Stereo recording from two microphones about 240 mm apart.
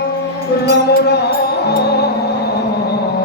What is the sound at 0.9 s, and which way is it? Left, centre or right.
Music, left.